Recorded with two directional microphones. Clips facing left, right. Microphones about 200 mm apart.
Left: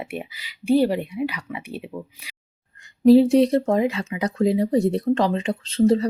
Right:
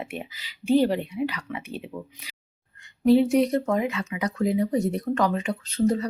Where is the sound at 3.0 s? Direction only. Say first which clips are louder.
Left 5 dB; 35° left (ahead or behind).